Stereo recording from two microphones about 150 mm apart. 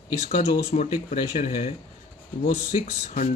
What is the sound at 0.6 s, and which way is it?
Speech, 45° left (ahead or behind).